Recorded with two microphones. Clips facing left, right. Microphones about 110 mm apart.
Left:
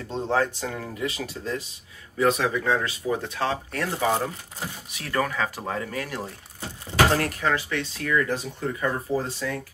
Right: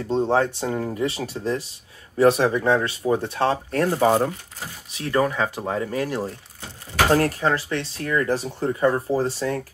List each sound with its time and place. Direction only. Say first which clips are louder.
0.1 s speech: right 4 dB; 25° right (ahead or behind)
4.9 s speech: right 5 dB; 25° right (ahead or behind)